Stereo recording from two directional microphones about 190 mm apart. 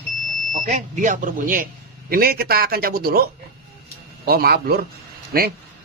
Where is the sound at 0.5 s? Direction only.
40° right (ahead or behind).